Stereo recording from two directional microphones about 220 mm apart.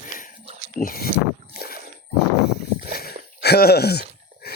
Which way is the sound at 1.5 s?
45° left (ahead or behind).